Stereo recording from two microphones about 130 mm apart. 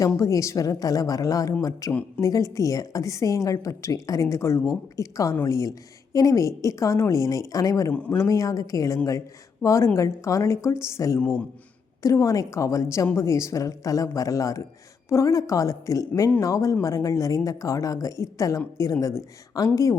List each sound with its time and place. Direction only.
0.0 s a woman's voice: 25° left (ahead or behind)
1.9 s speech: 10° left (ahead or behind)
2.2 s a woman's voice: 25° left (ahead or behind)
7.9 s speech: 10° left (ahead or behind)
8.2 s a woman's voice: 25° left (ahead or behind)
11.2 s speech: 10° left (ahead or behind)
12.0 s a woman's voice: 25° left (ahead or behind)